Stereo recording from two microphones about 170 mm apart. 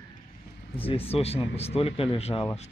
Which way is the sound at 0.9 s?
35° left (ahead or behind).